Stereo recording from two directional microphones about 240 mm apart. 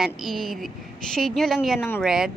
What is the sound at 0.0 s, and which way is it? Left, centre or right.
A woman's voice, centre.